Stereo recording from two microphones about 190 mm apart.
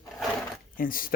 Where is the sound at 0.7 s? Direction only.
45° left (ahead or behind).